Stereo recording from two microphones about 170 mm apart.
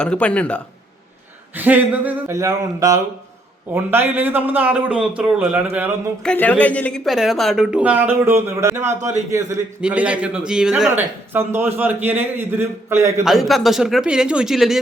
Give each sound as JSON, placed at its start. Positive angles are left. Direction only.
{"t": 0.0, "sound": "speech", "side_deg": 5}
{"t": 1.5, "sound": "speech", "side_deg": -10}
{"t": 6.2, "sound": "speech", "side_deg": 10}
{"t": 8.9, "sound": "a man's voice", "side_deg": -45}
{"t": 9.8, "sound": "speech", "side_deg": -5}
{"t": 13.2, "sound": "speech", "side_deg": 0}